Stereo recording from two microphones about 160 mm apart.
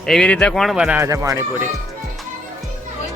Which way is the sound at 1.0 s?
20° right (ahead or behind).